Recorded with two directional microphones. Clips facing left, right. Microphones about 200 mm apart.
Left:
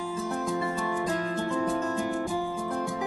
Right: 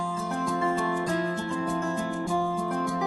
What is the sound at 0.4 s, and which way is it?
Music, 15° left (ahead or behind).